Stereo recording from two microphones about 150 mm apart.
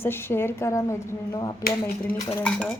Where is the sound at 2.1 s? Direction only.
20° left (ahead or behind).